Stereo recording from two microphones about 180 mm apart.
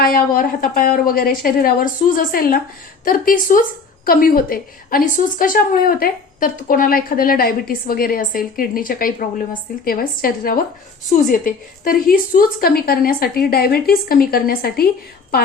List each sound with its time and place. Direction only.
0.0 s a woman's voice: 50° left (ahead or behind)